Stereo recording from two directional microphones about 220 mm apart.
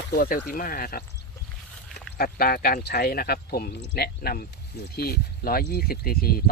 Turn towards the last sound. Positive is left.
turn(degrees=45)  # may be behind; listen again after turning